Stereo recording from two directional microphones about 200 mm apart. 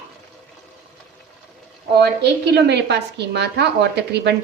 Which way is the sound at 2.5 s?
55° right (ahead or behind).